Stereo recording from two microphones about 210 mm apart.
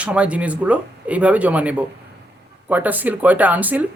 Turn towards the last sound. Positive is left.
turn(degrees=-10)  # may be behind; listen again after turning